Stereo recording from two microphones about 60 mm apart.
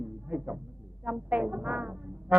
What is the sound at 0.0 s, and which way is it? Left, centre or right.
Music, right.